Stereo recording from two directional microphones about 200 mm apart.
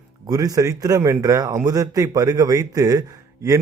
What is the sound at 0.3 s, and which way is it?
Speech, 20° right (ahead or behind).